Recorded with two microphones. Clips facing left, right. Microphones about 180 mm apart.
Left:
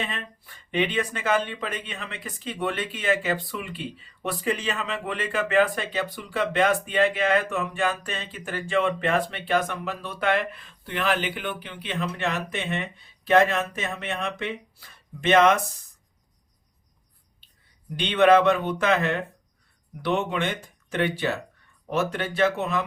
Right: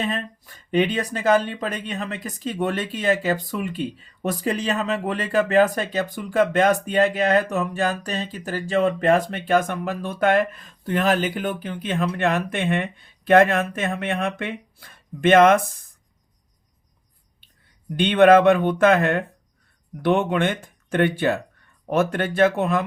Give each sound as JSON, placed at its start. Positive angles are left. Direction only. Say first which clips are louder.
{"t": 0.0, "sound": "speech", "louder": "right 7 dB", "side_deg": -40}
{"t": 17.9, "sound": "speech", "louder": "right 4 dB", "side_deg": -50}